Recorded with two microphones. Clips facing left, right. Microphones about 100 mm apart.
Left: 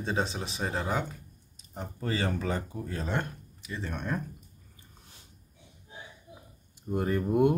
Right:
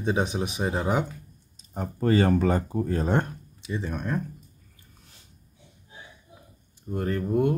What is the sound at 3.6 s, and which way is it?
Speech, 15° right (ahead or behind).